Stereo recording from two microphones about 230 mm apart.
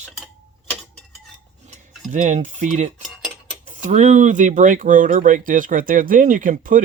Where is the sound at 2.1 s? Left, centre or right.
Right.